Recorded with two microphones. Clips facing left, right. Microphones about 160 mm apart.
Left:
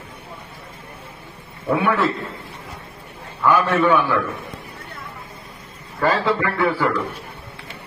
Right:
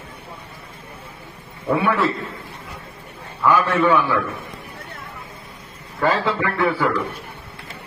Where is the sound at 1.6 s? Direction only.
Centre (ahead or behind).